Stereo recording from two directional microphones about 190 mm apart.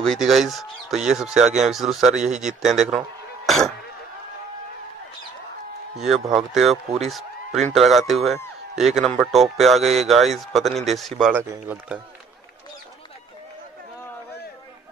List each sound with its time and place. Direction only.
0.0 s speech: centre (ahead or behind)
5.9 s speech: centre (ahead or behind)